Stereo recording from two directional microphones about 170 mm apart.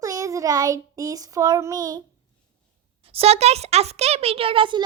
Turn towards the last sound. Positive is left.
turn(degrees=-30)  # may be behind; listen again after turning